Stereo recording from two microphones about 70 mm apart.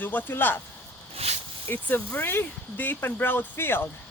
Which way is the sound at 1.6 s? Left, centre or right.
Left.